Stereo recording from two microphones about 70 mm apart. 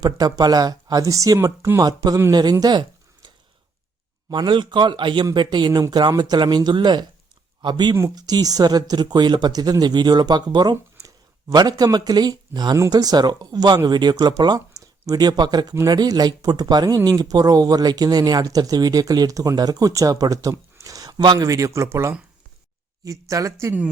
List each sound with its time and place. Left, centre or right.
0.0 s speech: right
1.8 s speech: right
4.3 s speech: right
8.1 s speech: right
11.4 s speech: right
21.3 s speech: right
23.3 s speech: right